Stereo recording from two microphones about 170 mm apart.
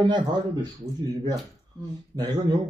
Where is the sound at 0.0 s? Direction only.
25° right (ahead or behind).